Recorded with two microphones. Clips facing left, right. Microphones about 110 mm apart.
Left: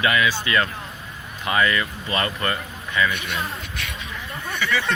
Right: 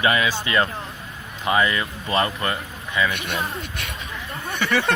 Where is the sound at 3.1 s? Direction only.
50° right (ahead or behind).